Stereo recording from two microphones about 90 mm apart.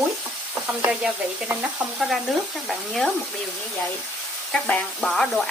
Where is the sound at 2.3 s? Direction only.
Centre (ahead or behind).